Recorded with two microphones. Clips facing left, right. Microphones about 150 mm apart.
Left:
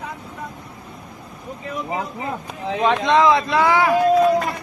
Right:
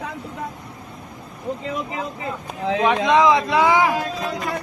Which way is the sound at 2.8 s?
10° right (ahead or behind).